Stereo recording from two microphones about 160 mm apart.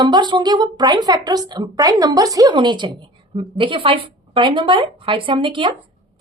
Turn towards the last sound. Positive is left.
turn(degrees=-30)  # may be behind; listen again after turning